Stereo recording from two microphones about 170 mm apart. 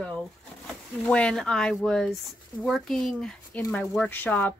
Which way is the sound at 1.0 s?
5° left (ahead or behind).